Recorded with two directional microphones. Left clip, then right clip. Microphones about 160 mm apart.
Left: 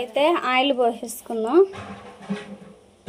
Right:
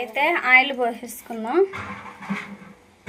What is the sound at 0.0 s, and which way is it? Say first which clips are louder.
Speech: left 1 dB; 40° left (ahead or behind).